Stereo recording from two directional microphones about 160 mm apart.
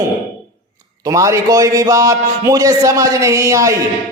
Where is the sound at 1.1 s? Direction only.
20° right (ahead or behind).